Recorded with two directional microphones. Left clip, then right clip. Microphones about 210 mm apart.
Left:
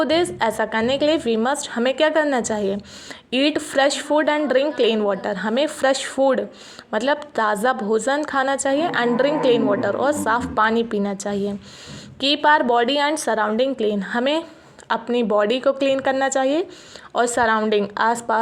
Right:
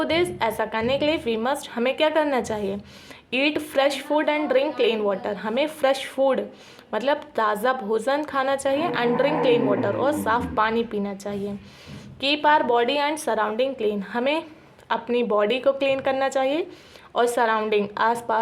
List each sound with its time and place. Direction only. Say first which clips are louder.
0.0 s a woman's voice: left 3 dB; 25° left (ahead or behind)